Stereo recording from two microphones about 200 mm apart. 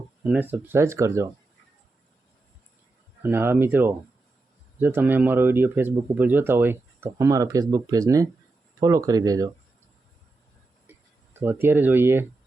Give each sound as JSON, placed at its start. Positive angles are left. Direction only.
{"t": 0.2, "sound": "speech", "side_deg": -10}
{"t": 3.2, "sound": "speech", "side_deg": -10}
{"t": 11.3, "sound": "speech", "side_deg": -10}